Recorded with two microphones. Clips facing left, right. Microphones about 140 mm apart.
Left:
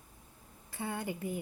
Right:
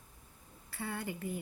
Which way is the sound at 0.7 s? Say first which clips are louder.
Left 2 dB; 20° left (ahead or behind).